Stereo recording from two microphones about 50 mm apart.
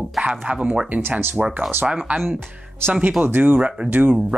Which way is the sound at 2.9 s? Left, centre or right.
Right.